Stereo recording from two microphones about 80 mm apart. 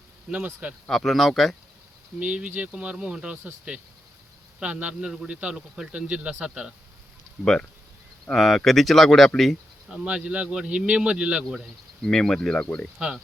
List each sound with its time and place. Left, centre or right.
0.3 s a man's voice: centre
0.9 s speech: centre
2.1 s a man's voice: centre
7.4 s speech: centre
10.0 s a man's voice: centre
12.0 s speech: centre